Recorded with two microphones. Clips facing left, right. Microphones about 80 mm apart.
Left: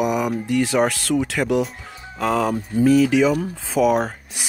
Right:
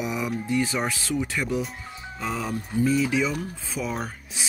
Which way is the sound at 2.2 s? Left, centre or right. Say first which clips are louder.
Left 9 dB; left.